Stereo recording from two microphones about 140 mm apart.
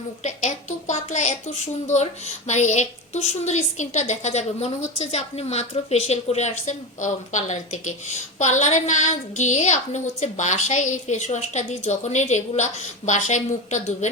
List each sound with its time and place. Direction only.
0.2 s a woman's voice: 60° left (ahead or behind)